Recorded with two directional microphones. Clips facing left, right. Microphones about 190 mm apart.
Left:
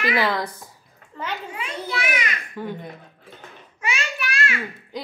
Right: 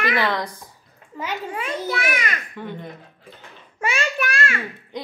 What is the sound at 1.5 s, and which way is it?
Children playing, 50° right (ahead or behind).